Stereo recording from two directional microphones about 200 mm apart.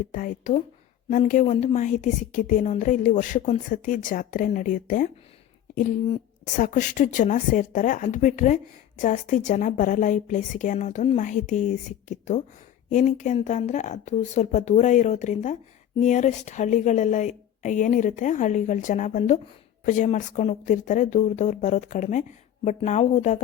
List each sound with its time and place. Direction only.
0.1 s speech: 40° left (ahead or behind)
6.4 s speech: 40° left (ahead or behind)